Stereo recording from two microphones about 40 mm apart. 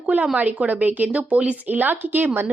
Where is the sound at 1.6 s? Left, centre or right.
Right.